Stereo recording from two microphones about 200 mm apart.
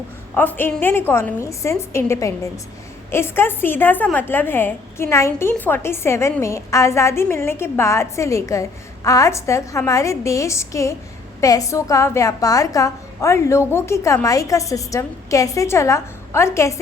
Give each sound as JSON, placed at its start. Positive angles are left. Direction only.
{"t": 0.3, "sound": "a woman's voice", "side_deg": 10}